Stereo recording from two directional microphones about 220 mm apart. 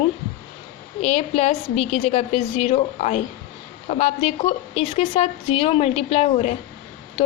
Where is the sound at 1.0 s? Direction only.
30° left (ahead or behind).